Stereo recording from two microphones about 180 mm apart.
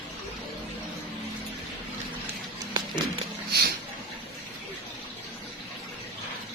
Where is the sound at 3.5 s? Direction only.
60° right (ahead or behind).